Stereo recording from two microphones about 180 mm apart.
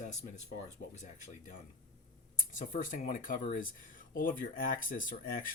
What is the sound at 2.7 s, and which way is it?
Speech, 45° left (ahead or behind).